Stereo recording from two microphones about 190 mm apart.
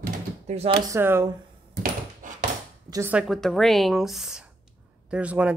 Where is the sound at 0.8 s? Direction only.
15° right (ahead or behind).